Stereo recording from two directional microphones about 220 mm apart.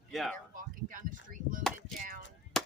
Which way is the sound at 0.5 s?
35° right (ahead or behind).